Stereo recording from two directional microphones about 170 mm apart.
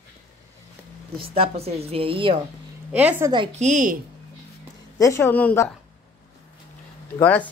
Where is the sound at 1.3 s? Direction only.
35° right (ahead or behind).